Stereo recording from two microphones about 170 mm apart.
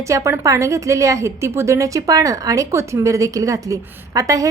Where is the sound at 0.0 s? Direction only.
20° right (ahead or behind).